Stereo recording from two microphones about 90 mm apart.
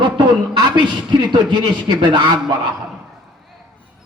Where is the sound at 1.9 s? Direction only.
60° right (ahead or behind).